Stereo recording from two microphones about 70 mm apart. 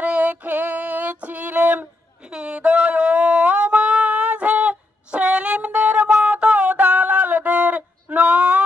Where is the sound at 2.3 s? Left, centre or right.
Centre.